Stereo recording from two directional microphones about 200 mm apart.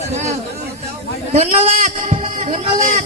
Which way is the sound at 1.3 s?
30° right (ahead or behind).